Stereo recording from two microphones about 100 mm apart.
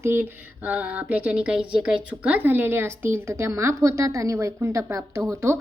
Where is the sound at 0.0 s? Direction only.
20° right (ahead or behind).